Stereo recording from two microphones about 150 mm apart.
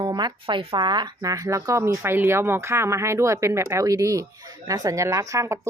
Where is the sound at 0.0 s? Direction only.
30° right (ahead or behind).